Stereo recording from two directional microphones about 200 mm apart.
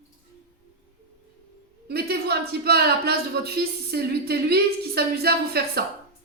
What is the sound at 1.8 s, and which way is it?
Speech, 50° right (ahead or behind).